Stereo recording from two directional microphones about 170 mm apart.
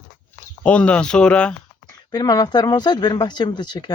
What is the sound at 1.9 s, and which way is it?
Speech, 25° left (ahead or behind).